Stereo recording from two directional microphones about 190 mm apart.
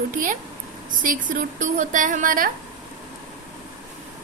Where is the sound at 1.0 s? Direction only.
45° right (ahead or behind).